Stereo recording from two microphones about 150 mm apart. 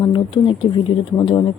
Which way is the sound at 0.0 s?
35° left (ahead or behind).